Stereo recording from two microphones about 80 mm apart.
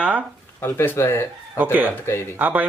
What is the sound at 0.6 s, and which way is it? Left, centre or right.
Speech, left.